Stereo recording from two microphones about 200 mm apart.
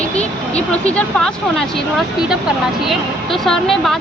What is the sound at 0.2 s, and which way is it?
Speech, 5° left (ahead or behind).